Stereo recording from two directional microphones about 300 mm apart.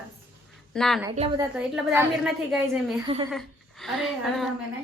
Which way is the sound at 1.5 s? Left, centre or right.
Centre.